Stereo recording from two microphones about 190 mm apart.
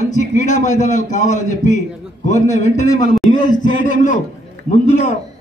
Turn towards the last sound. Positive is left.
turn(degrees=40)  # may be behind; listen again after turning